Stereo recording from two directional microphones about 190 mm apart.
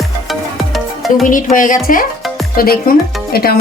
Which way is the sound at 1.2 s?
45° left (ahead or behind).